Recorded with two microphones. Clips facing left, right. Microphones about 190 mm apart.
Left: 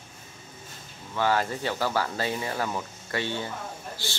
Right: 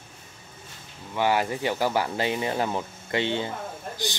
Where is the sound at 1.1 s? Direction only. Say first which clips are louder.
Right 2 dB; 15° right (ahead or behind).